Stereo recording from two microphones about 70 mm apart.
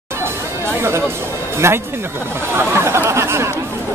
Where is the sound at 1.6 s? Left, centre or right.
Right.